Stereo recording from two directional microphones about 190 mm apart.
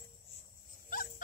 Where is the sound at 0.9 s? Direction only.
45° left (ahead or behind).